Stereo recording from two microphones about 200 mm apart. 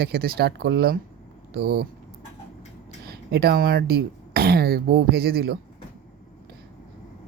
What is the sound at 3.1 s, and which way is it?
Speech, 50° right (ahead or behind).